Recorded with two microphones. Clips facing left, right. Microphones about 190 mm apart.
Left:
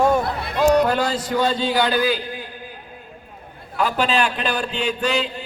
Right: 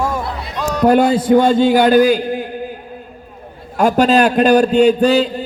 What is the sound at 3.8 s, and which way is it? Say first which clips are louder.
A man's voice: right 9 dB; 45° right (ahead or behind).